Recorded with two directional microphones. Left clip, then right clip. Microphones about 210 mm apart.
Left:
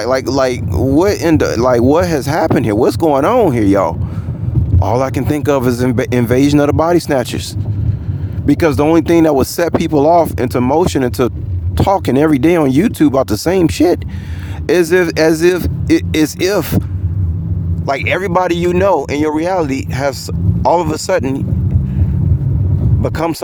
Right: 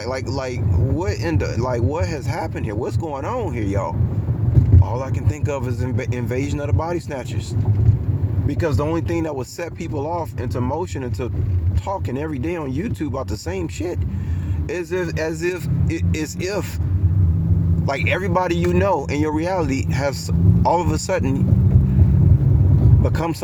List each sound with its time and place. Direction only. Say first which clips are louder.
0.0 s speech: left 12 dB; 40° left (ahead or behind)
8.4 s speech: left 11 dB; 55° left (ahead or behind)
17.8 s speech: left 7 dB; 40° left (ahead or behind)
23.0 s speech: left 10 dB; 45° left (ahead or behind)